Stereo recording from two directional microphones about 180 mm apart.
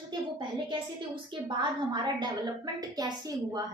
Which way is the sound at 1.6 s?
25° right (ahead or behind).